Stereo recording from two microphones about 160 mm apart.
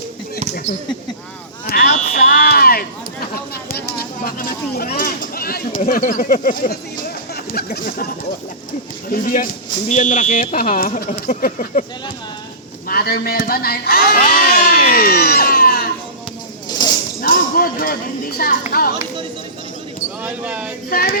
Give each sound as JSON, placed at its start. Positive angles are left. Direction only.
{"t": 1.6, "sound": "a sound", "side_deg": 65}
{"t": 2.1, "sound": "smoke detector", "side_deg": 65}
{"t": 3.5, "sound": "speech", "side_deg": 70}
{"t": 9.0, "sound": "speech", "side_deg": 65}
{"t": 12.9, "sound": "speech", "side_deg": 70}
{"t": 16.6, "sound": "a sound", "side_deg": 25}
{"t": 17.2, "sound": "speech", "side_deg": 65}
{"t": 20.2, "sound": "speech", "side_deg": -10}
{"t": 20.9, "sound": "speech", "side_deg": 65}